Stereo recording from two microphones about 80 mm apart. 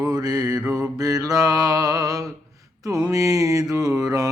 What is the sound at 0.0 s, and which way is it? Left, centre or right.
Mantra, right.